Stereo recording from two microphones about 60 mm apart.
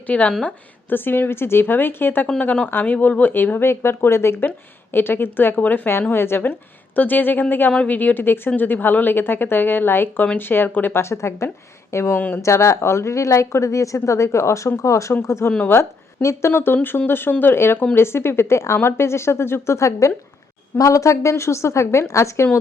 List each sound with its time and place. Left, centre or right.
0.1 s a woman's voice: left
0.9 s speech: left
3.7 s speech: left
4.4 s a woman's voice: left
10.9 s a woman's voice: left
14.0 s a woman's voice: left
20.7 s a woman's voice: left